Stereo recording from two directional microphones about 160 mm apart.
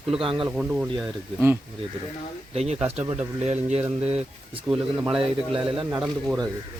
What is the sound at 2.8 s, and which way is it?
Speech, 40° right (ahead or behind).